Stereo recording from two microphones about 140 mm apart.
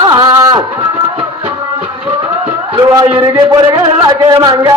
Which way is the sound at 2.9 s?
30° right (ahead or behind).